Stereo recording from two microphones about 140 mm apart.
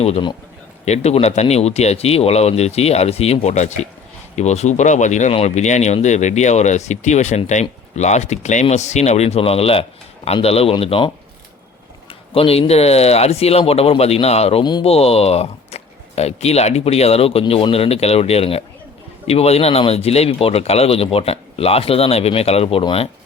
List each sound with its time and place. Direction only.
0.9 s speech: 50° left (ahead or behind)
12.3 s speech: 45° left (ahead or behind)
14.6 s speech: 30° left (ahead or behind)
14.8 s speech: 45° left (ahead or behind)